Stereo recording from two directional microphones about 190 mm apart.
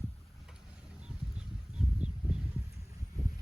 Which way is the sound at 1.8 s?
Centre (ahead or behind).